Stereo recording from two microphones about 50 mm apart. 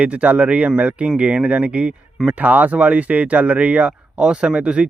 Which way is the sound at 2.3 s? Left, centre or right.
Right.